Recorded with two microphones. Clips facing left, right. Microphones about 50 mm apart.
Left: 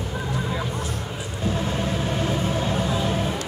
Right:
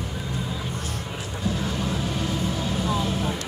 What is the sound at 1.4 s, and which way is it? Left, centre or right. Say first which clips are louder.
Vehicle: left 2 dB; left.